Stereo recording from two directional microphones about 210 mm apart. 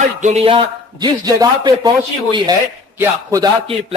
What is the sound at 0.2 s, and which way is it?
A man's voice, 30° right (ahead or behind).